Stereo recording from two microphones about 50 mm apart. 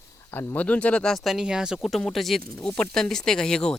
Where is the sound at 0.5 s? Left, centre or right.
Left.